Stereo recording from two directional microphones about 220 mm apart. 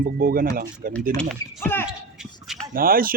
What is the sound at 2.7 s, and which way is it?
Speech, 40° right (ahead or behind).